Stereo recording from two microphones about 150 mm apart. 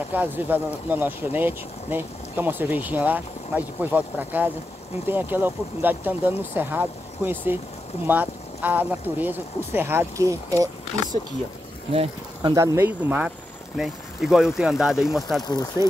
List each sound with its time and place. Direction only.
0.1 s speech: 10° right (ahead or behind)
12.4 s speech: 25° right (ahead or behind); by 15.4 s centre (ahead or behind)
15.4 s speech: 25° left (ahead or behind)